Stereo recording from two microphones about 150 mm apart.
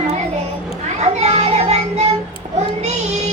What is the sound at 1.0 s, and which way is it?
Music, 45° right (ahead or behind).